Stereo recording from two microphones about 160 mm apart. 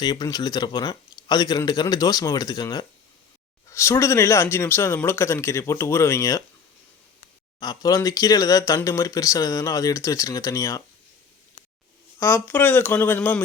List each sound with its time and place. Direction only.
0.0 s a man's voice: 25° left (ahead or behind)
7.6 s speech: 25° left (ahead or behind)
12.2 s a man's voice: 15° left (ahead or behind)